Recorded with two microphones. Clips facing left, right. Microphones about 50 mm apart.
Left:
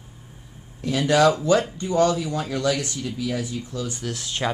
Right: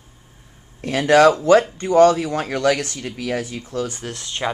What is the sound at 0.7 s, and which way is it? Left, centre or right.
Speech, right.